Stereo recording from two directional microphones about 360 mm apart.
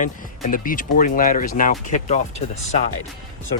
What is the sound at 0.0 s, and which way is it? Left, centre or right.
Speech, left.